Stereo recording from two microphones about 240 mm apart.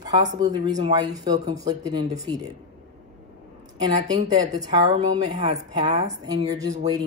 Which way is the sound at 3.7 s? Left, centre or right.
Centre.